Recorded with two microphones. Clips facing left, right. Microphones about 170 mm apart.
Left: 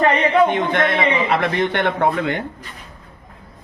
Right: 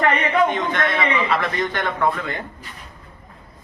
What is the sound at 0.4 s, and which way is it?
A man's voice, 60° left (ahead or behind).